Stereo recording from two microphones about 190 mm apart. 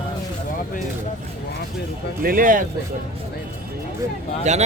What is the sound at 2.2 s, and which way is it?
Speech, 50° right (ahead or behind).